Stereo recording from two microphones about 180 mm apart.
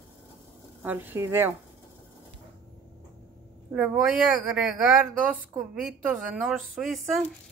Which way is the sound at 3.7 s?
5° right (ahead or behind).